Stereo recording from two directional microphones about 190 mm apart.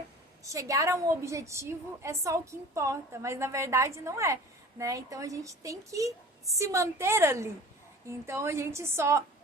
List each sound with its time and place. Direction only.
0.4 s a woman's voice: 15° right (ahead or behind)